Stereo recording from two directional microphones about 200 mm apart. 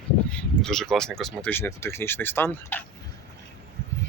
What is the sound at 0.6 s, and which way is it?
Speech, 5° left (ahead or behind).